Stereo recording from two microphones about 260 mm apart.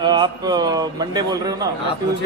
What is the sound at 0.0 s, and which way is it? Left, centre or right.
A man's voice, centre.